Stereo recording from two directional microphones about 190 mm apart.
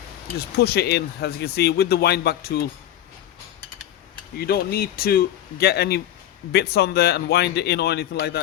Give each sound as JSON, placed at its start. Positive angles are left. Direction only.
{"t": 0.3, "sound": "speech", "side_deg": 55}
{"t": 4.4, "sound": "speech", "side_deg": 55}